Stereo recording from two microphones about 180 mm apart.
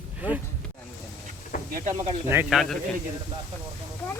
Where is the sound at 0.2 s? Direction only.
10° right (ahead or behind).